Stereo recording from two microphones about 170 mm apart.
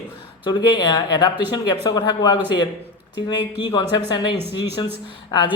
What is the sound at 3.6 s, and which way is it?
Speech, 25° left (ahead or behind).